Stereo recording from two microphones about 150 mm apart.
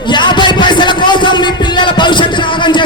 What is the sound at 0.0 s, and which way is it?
Music, 30° left (ahead or behind).